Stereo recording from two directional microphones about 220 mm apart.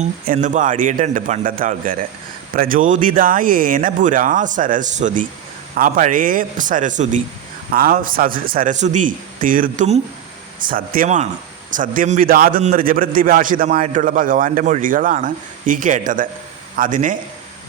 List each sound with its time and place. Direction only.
0.0 s a man's voice: 35° right (ahead or behind)